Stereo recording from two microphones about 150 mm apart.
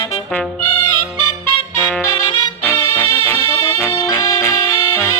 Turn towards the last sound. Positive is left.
turn(degrees=15)  # may be behind; listen again after turning